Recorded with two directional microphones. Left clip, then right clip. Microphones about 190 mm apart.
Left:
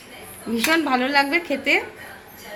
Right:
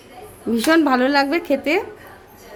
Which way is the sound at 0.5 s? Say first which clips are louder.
Right 4 dB; 60° right (ahead or behind).